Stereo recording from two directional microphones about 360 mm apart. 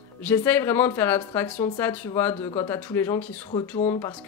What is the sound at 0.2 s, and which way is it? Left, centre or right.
Speech, centre.